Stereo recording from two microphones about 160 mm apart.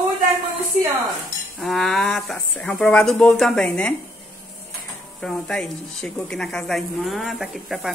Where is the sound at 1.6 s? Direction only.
Centre (ahead or behind).